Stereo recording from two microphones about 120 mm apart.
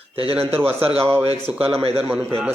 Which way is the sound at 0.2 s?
50° right (ahead or behind).